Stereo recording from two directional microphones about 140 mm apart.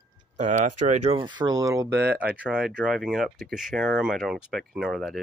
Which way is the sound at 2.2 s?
10° right (ahead or behind).